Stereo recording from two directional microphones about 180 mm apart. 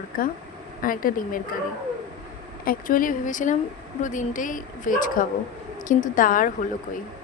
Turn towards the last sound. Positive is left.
turn(degrees=50)  # may be behind; listen again after turning